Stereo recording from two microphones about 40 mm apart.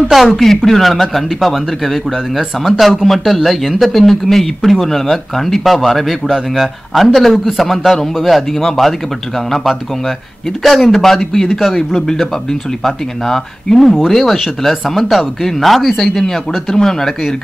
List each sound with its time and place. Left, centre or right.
0.4 s speech: centre
6.2 s speech: centre
6.6 s speech: centre
10.6 s speech: centre